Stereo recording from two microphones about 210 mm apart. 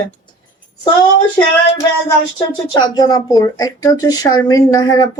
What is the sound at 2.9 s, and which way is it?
Speech, 20° left (ahead or behind).